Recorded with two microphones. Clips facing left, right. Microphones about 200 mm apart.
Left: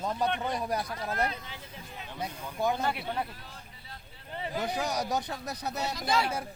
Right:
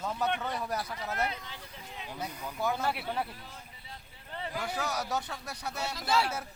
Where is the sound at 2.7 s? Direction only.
5° right (ahead or behind).